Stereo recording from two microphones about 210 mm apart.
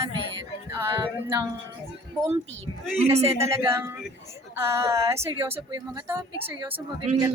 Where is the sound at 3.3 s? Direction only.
10° right (ahead or behind).